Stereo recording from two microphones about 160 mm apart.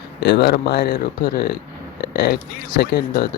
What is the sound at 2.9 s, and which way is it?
Speech, 90° left.